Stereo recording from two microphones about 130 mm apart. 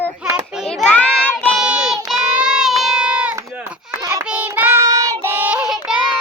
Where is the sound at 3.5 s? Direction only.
15° right (ahead or behind).